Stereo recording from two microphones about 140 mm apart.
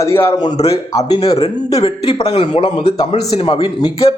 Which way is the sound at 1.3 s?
45° left (ahead or behind).